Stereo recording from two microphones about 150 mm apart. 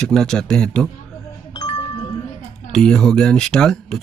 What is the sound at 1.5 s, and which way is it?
Music, 30° left (ahead or behind).